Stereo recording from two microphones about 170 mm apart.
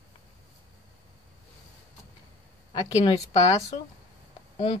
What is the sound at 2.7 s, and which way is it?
Speech, 30° left (ahead or behind).